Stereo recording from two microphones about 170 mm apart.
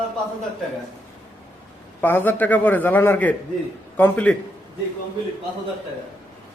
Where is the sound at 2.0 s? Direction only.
10° left (ahead or behind).